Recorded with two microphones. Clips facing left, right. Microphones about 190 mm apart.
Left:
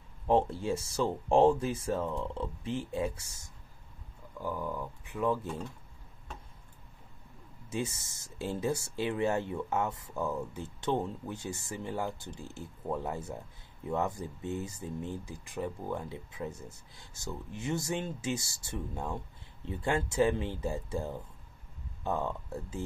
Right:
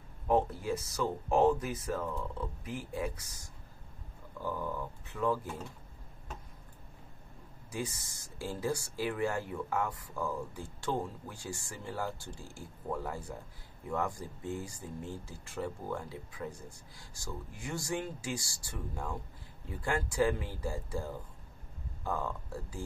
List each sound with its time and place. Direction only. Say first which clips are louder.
0.3 s speech: left 2 dB; 25° left (ahead or behind)
4.4 s speech: left 1 dB; 10° left (ahead or behind)
7.7 s speech: left 3 dB; 25° left (ahead or behind)